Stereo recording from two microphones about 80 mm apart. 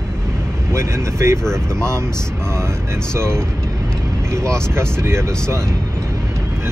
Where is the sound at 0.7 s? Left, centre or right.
Right.